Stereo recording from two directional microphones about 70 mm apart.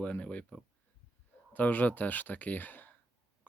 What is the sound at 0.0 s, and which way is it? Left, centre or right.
Speech, centre.